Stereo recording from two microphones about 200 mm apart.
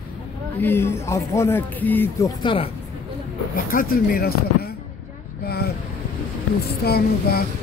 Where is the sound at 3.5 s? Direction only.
45° left (ahead or behind).